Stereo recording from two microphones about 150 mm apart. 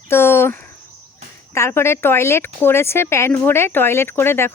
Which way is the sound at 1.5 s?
15° left (ahead or behind).